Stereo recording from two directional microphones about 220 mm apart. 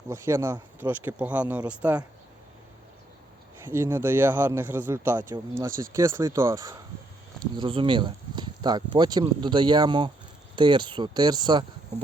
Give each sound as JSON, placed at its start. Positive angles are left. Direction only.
{"t": 0.1, "sound": "speech", "side_deg": -10}
{"t": 3.6, "sound": "speech", "side_deg": -10}